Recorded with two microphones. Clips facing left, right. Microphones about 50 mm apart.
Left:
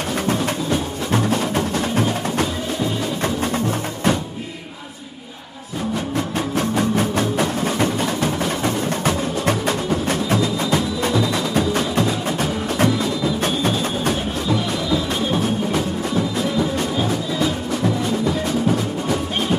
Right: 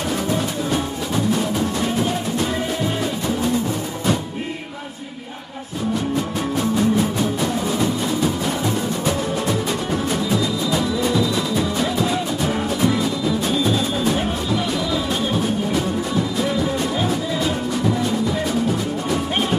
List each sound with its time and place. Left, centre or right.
1.1 s music: left
6.5 s music: left
12.4 s music: left
16.9 s music: centre